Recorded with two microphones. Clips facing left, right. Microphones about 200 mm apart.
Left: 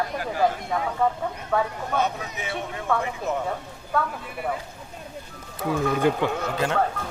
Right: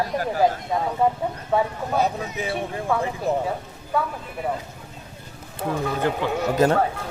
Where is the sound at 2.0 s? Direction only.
35° right (ahead or behind).